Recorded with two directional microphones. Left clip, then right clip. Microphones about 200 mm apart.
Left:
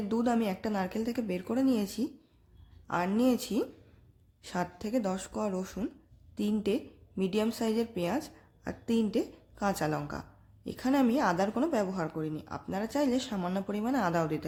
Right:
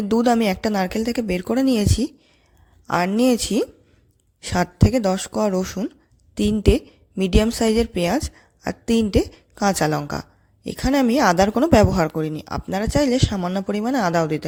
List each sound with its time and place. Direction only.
0.1 s a woman's voice: 40° right (ahead or behind)